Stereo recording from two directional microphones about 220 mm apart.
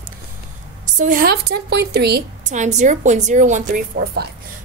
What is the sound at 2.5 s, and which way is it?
A woman's voice, 35° right (ahead or behind).